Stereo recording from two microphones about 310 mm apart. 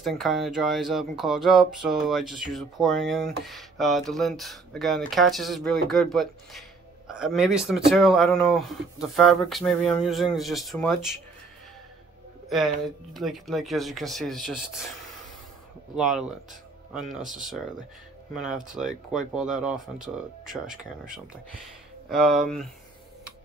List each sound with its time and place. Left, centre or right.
0.0 s speech: centre
12.4 s speech: centre
16.0 s speech: centre
22.1 s speech: centre